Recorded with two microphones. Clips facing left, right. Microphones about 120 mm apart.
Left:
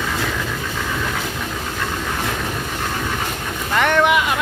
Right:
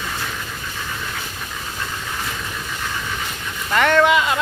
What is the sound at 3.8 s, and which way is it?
Speech, 15° left (ahead or behind).